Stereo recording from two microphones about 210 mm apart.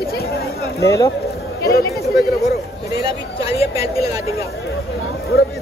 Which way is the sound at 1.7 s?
50° left (ahead or behind).